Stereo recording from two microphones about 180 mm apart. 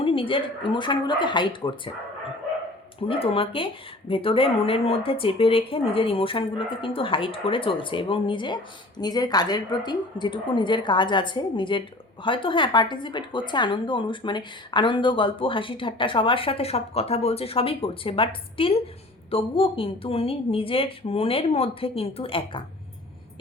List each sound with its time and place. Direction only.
0.0 s a woman's voice: 30° left (ahead or behind)
3.1 s a woman's voice: 30° left (ahead or behind)